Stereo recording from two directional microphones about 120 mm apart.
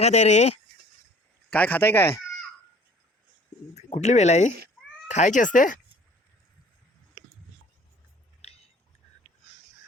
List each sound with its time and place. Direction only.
0.0 s speech: 70° left (ahead or behind)
1.5 s speech: 15° left (ahead or behind)
3.8 s speech: 65° left (ahead or behind); by 5.7 s 90° left
8.4 s a sound: 60° left (ahead or behind)